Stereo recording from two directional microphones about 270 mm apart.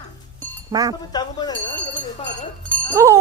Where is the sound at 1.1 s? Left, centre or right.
Centre.